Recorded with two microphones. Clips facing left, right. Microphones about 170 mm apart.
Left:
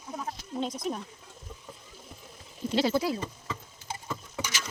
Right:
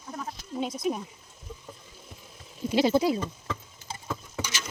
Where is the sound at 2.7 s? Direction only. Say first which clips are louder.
Right 4 dB; 15° right (ahead or behind).